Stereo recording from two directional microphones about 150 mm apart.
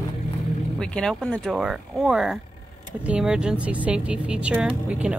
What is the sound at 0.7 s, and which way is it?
Speech, 5° left (ahead or behind).